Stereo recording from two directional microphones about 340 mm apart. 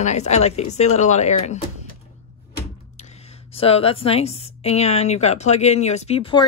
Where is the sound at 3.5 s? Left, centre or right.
Centre.